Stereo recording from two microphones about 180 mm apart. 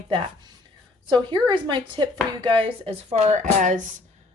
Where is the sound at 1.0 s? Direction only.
25° right (ahead or behind).